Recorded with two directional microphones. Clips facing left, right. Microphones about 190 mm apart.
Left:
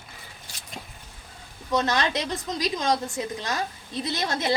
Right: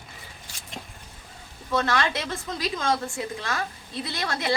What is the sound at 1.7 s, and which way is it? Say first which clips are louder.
A woman's voice: left 1 dB; 20° left (ahead or behind).